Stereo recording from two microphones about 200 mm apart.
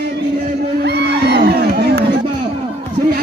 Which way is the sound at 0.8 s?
55° right (ahead or behind).